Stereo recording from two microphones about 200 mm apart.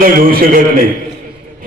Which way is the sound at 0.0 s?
45° right (ahead or behind).